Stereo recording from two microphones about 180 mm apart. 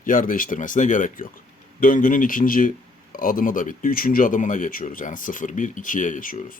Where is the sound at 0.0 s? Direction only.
50° left (ahead or behind).